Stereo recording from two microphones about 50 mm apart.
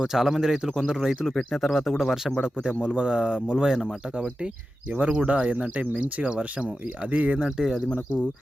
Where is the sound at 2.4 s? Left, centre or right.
Centre.